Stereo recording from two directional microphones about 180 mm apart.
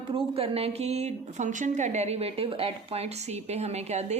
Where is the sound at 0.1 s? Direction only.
30° right (ahead or behind).